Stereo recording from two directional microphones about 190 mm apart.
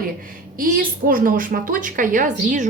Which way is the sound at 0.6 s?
45° right (ahead or behind).